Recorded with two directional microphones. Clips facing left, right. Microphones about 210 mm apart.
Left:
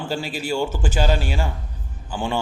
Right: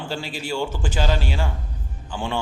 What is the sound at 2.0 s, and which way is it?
Speech, 5° left (ahead or behind).